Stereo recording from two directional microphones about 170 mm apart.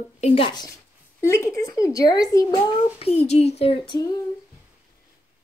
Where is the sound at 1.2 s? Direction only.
15° left (ahead or behind).